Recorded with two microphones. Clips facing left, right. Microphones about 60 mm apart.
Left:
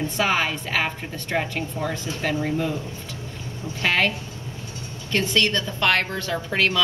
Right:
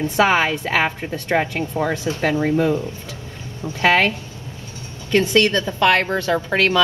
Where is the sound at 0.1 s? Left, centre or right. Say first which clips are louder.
Right 8 dB; right.